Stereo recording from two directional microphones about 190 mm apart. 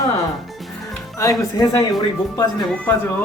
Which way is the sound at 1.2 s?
20° left (ahead or behind).